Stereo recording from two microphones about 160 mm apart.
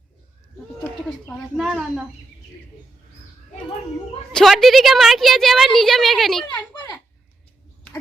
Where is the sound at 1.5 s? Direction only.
5° right (ahead or behind).